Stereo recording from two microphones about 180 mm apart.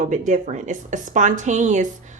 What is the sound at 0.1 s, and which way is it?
A woman's voice, 45° right (ahead or behind).